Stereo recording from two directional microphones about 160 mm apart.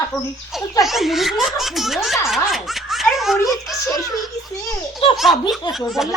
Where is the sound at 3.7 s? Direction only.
Centre (ahead or behind).